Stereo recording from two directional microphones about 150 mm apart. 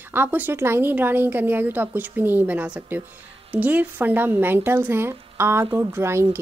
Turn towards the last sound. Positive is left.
turn(degrees=-15)  # may be behind; listen again after turning